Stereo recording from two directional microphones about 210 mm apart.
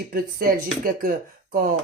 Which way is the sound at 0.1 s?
45° right (ahead or behind).